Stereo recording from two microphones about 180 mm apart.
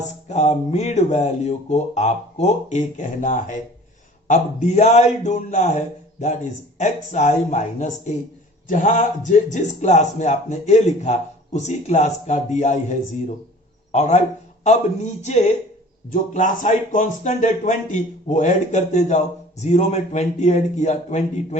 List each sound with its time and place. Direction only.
0.3 s a man's voice: 40° left (ahead or behind)